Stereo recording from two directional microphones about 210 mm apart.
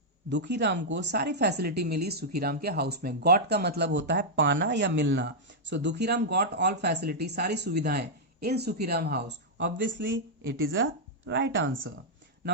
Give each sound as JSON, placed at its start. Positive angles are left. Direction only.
{"t": 0.3, "sound": "speech", "side_deg": -55}